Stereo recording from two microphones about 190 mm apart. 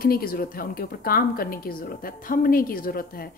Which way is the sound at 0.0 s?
50° left (ahead or behind).